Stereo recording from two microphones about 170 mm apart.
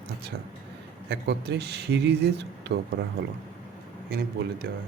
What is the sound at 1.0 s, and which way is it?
Speech, 90° right.